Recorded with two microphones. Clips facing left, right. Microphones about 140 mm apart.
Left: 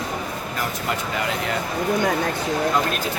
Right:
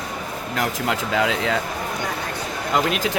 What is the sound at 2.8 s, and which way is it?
Speech, 90° right.